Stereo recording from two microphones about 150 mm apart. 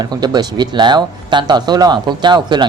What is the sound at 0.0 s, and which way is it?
Speech, 25° right (ahead or behind).